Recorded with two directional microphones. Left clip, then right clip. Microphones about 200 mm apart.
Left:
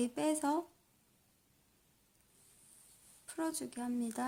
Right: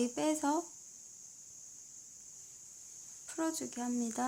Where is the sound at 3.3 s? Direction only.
Centre (ahead or behind).